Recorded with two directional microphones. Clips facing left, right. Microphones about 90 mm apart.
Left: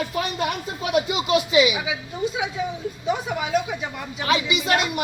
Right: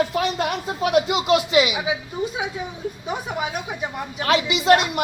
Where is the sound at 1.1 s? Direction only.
70° right (ahead or behind).